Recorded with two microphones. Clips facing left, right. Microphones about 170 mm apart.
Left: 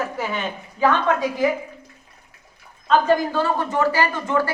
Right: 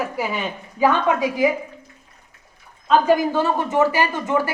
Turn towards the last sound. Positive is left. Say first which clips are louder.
# even
turn(degrees=-15)  # may be behind; listen again after turning